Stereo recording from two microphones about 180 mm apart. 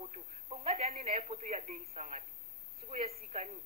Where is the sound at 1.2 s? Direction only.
40° right (ahead or behind).